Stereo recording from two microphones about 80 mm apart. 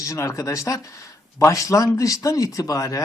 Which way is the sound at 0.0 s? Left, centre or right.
Left.